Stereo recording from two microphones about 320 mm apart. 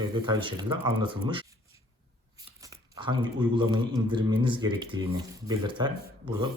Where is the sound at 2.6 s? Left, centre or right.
Centre.